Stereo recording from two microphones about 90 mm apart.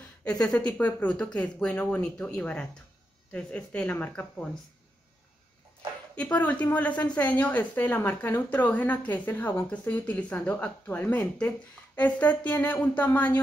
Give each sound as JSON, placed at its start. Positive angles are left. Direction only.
{"t": 0.4, "sound": "a woman's voice", "side_deg": 10}
{"t": 6.1, "sound": "a woman's voice", "side_deg": 15}